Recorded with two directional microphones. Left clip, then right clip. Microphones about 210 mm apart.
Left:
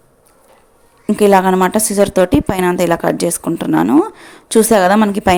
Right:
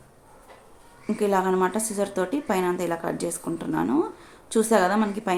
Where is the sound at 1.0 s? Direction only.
45° left (ahead or behind).